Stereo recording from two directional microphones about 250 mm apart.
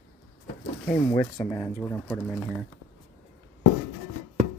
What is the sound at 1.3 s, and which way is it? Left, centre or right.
Speech, centre.